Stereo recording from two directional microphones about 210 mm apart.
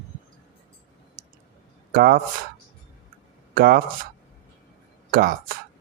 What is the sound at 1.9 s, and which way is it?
Speech, 45° right (ahead or behind).